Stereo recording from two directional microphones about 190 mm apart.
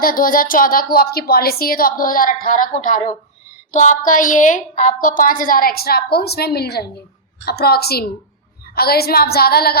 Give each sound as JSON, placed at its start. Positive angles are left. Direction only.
{"t": 0.0, "sound": "a woman's voice", "side_deg": 50}